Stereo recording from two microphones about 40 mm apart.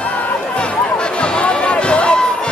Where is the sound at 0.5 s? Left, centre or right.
Left.